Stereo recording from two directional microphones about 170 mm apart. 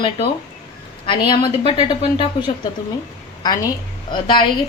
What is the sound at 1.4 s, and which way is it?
A woman's voice, 30° left (ahead or behind).